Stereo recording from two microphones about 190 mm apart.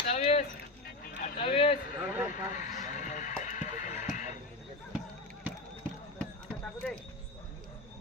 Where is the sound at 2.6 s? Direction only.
40° left (ahead or behind).